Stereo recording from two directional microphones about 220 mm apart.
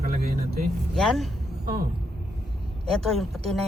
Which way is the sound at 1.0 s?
Centre (ahead or behind).